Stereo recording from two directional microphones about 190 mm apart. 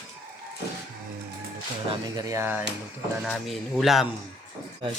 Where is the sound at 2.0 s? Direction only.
20° right (ahead or behind).